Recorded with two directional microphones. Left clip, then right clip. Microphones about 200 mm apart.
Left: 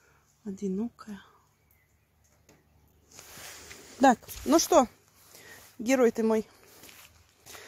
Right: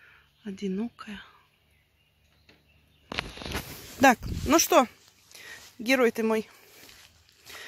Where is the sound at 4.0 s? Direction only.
5° left (ahead or behind).